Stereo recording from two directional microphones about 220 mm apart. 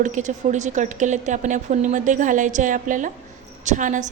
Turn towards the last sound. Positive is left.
turn(degrees=-35)  # may be behind; listen again after turning